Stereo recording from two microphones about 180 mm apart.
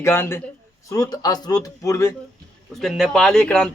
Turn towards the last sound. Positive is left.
turn(degrees=5)  # may be behind; listen again after turning